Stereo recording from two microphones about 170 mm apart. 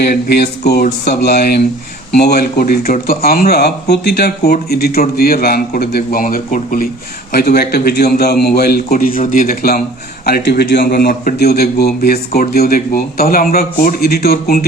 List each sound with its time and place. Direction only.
0.0 s speech: 70° left (ahead or behind); by 6.8 s 55° left (ahead or behind)
7.3 s speech: 65° left (ahead or behind)